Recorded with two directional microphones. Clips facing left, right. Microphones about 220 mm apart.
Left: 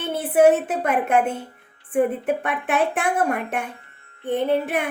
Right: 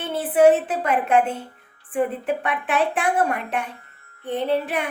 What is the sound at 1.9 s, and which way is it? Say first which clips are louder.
A woman's voice: left 3 dB; 45° left (ahead or behind).